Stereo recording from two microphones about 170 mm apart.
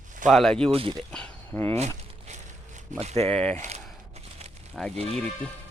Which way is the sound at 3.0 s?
40° right (ahead or behind).